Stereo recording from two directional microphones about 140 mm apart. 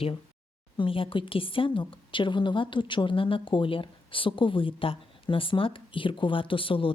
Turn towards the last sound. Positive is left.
turn(degrees=40)  # may be behind; listen again after turning